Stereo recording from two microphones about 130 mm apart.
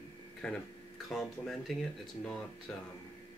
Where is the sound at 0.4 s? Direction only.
5° left (ahead or behind).